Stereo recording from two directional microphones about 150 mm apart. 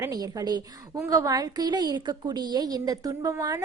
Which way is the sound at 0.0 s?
25° right (ahead or behind).